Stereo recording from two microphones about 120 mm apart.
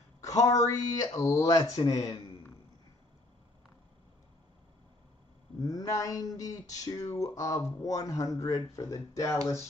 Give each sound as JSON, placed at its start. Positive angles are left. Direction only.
{"t": 0.2, "sound": "a sound", "side_deg": 30}
{"t": 0.7, "sound": "speech", "side_deg": 30}
{"t": 5.6, "sound": "speech", "side_deg": 30}